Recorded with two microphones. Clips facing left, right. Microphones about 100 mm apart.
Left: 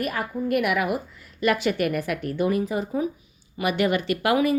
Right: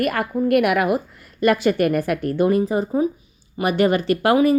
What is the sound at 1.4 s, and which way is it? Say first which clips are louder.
A woman's voice: right 5 dB; 45° right (ahead or behind).